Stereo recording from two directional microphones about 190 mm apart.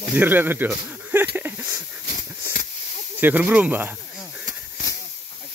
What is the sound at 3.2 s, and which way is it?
Speech, 10° right (ahead or behind).